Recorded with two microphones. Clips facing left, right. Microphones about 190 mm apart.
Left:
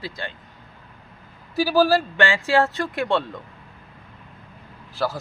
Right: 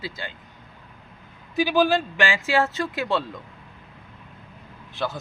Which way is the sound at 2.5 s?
Centre (ahead or behind).